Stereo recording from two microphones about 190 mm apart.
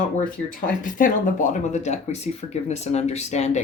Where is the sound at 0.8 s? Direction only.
45° left (ahead or behind).